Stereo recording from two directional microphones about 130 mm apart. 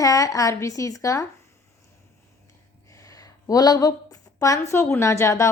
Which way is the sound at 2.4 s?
25° left (ahead or behind).